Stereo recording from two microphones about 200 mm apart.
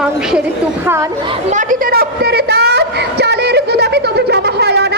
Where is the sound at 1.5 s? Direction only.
40° right (ahead or behind); by 4.9 s 55° right (ahead or behind).